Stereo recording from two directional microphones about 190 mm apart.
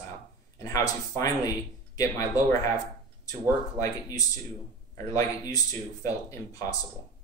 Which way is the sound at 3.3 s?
20° left (ahead or behind).